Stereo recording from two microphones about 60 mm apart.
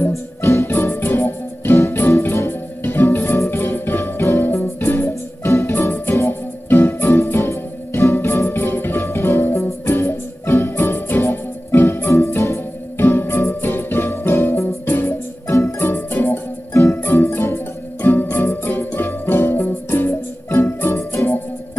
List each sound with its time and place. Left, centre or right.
0.1 s music: left